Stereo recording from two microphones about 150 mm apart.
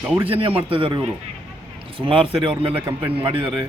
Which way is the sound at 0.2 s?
40° right (ahead or behind).